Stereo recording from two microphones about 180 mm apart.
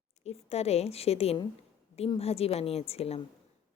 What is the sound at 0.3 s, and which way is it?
A woman's voice, 35° left (ahead or behind).